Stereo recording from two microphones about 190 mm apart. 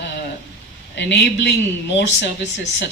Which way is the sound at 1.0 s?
65° left (ahead or behind).